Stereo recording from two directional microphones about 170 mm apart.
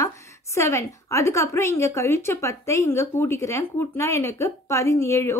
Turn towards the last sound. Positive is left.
turn(degrees=15)  # may be behind; listen again after turning